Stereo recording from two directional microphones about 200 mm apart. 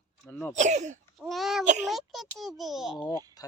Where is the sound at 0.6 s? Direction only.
35° right (ahead or behind).